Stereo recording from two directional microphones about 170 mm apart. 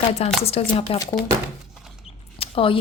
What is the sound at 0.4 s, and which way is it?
Speech, 35° left (ahead or behind).